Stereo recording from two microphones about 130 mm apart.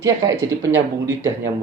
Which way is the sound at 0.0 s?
25° right (ahead or behind).